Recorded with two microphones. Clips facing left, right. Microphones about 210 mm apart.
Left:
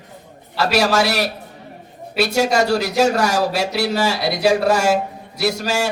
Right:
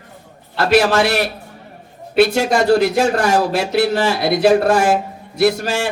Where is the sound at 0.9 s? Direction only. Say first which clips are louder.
Right 2 dB; 50° right (ahead or behind).